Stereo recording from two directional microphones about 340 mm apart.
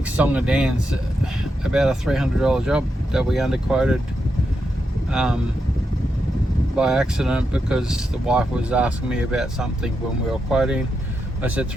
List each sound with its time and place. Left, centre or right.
0.0 s speech: centre
5.1 s speech: centre
6.7 s speech: centre